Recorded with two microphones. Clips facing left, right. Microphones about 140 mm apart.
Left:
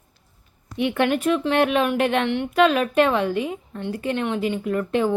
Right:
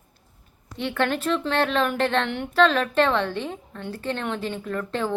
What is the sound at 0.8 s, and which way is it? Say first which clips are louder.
A woman's voice: left 4 dB; 15° left (ahead or behind).